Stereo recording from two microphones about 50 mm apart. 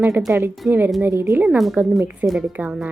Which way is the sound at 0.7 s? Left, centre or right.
Right.